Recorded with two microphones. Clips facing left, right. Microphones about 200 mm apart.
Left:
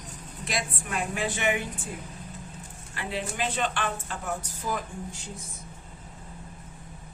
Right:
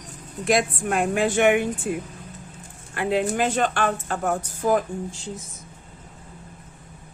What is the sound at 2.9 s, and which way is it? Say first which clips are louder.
Speech: right 11 dB; 55° right (ahead or behind).